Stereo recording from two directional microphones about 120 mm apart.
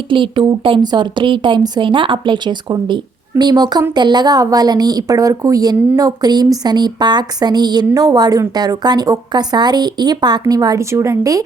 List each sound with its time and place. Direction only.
0.1 s a woman's voice: 45° right (ahead or behind); by 11.4 s 30° right (ahead or behind)